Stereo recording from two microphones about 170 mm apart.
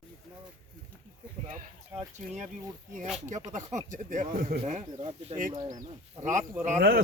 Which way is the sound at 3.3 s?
45° right (ahead or behind).